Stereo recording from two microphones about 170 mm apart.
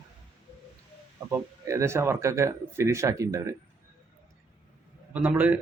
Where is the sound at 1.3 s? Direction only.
20° right (ahead or behind).